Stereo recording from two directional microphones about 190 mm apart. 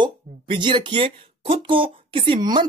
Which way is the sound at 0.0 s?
25° right (ahead or behind).